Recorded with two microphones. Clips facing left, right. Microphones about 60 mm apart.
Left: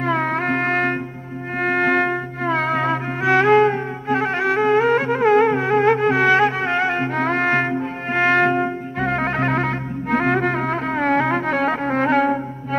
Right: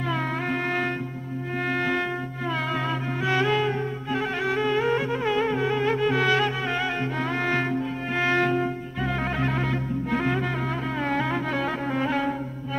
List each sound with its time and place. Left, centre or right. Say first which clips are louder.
0.0 s music: left 7 dB; left